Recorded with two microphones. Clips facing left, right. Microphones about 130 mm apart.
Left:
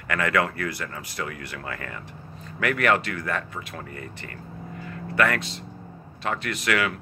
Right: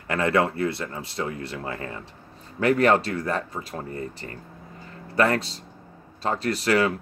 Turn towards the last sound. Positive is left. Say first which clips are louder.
# right 4 dB
turn(degrees=-30)  # may be behind; listen again after turning